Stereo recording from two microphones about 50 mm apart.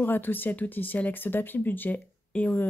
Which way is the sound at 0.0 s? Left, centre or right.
Left.